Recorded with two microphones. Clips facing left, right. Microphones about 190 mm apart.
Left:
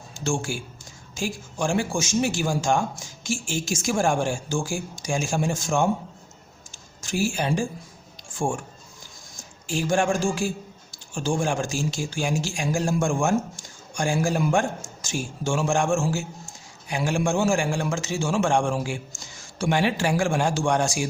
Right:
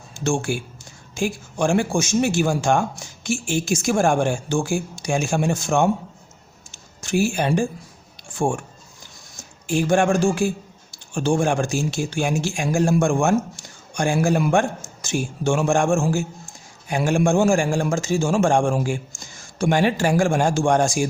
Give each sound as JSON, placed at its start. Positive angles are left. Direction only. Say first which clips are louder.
{"t": 0.3, "sound": "speech", "louder": "right 4 dB", "side_deg": -60}
{"t": 6.7, "sound": "a sound", "louder": "right 6 dB", "side_deg": -65}
{"t": 8.3, "sound": "speech", "louder": "right 4 dB", "side_deg": -60}
{"t": 9.6, "sound": "a man's voice", "louder": "right 4 dB", "side_deg": -60}